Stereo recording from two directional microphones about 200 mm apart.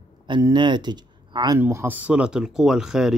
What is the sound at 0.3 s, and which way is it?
Speech, 20° right (ahead or behind).